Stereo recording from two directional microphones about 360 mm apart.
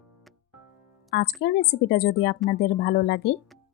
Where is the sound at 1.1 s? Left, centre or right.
Left.